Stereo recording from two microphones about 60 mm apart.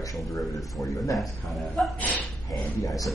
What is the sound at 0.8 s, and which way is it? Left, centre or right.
Speech, left.